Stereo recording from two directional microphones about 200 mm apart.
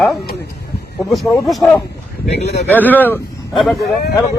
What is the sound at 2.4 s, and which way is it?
Speech, 55° left (ahead or behind).